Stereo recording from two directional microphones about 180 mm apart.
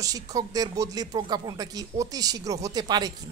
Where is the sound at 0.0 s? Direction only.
20° right (ahead or behind).